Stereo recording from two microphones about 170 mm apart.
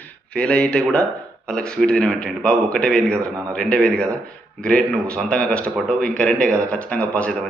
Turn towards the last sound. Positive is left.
turn(degrees=5)  # may be behind; listen again after turning